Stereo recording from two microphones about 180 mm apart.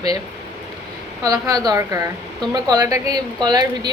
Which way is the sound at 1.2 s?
20° right (ahead or behind).